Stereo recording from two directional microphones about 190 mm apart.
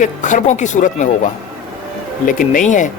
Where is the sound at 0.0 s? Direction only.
40° left (ahead or behind).